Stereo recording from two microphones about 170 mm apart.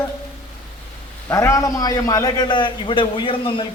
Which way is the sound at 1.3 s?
20° left (ahead or behind).